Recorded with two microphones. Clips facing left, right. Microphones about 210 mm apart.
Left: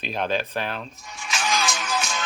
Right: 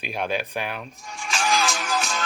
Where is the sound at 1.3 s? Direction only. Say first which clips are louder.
Right 2 dB; 30° right (ahead or behind).